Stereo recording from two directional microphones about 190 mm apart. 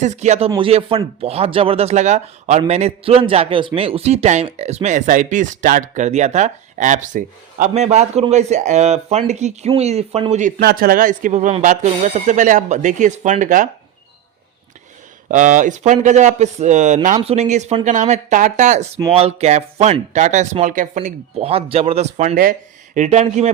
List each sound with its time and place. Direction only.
0.0 s speech: 35° right (ahead or behind)
10.6 s speech: 50° right (ahead or behind)
15.3 s speech: 40° right (ahead or behind)